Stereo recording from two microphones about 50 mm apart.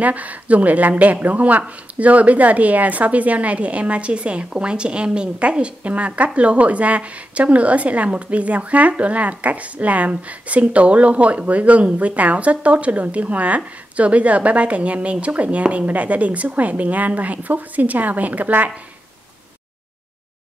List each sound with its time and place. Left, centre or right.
0.0 s a woman's voice: right